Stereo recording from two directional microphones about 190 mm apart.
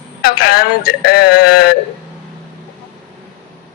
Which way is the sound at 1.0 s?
50° left (ahead or behind).